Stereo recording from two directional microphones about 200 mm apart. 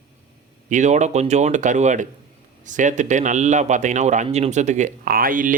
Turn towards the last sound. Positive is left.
turn(degrees=-45)  # may be behind; listen again after turning